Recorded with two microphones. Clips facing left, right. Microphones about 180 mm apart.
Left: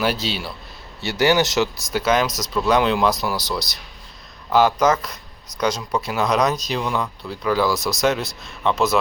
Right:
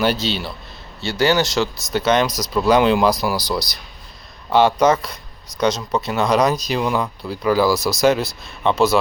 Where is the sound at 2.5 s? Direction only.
5° right (ahead or behind).